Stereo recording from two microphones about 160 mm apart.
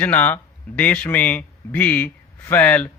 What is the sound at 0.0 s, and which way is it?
A man's voice, 10° left (ahead or behind).